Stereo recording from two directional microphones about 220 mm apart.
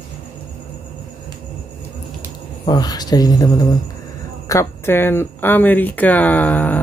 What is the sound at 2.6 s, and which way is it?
Speech, 20° left (ahead or behind).